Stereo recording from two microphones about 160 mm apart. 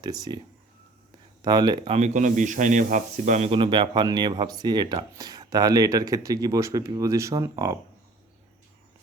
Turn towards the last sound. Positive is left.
turn(degrees=-20)  # may be behind; listen again after turning